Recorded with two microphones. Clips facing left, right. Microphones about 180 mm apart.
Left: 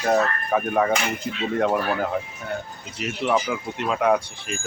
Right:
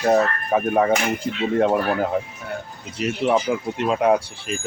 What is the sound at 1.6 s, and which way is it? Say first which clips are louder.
Speech: right 3 dB; 20° right (ahead or behind).